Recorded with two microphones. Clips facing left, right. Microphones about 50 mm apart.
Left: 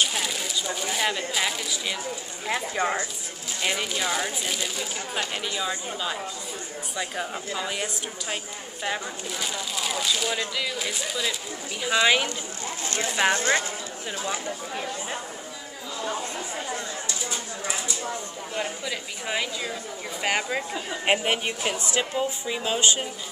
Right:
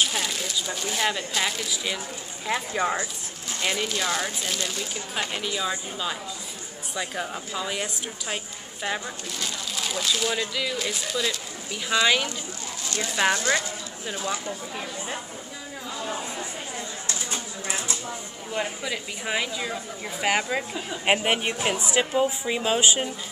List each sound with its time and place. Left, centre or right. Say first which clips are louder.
0.0 s speech: even; centre
12.8 s speech: even; left
18.6 s speech: right 1 dB; centre